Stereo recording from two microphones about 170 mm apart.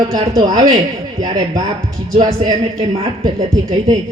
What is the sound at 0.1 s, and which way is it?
A woman's voice, 20° right (ahead or behind).